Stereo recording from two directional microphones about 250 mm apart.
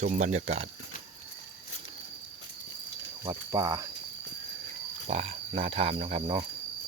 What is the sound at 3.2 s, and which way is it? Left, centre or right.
Speech, centre.